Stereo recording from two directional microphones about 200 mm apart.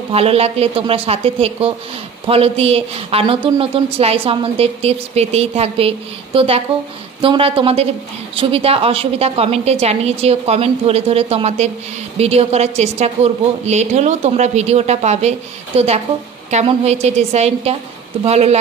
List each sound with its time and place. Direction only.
0.1 s a woman's voice: 30° right (ahead or behind)